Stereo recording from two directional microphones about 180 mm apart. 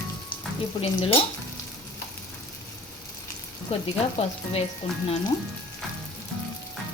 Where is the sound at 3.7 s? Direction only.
35° left (ahead or behind).